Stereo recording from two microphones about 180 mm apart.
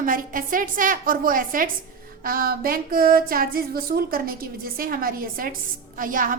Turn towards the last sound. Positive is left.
turn(degrees=-50)  # may be behind; listen again after turning